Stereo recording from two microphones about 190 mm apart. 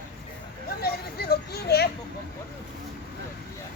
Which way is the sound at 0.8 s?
55° left (ahead or behind).